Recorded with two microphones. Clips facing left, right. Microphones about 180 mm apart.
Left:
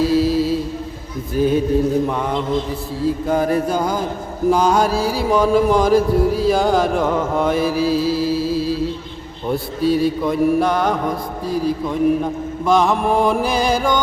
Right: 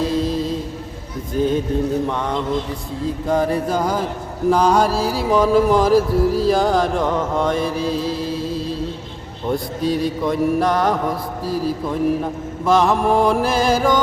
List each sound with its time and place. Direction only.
0.0 s mantra: 5° left (ahead or behind)
1.4 s a sound: 10° left (ahead or behind)
3.2 s music: centre (ahead or behind)